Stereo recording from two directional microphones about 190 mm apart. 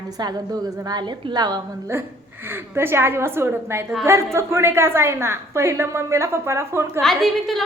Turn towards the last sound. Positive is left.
turn(degrees=0)  # may be behind; listen again after turning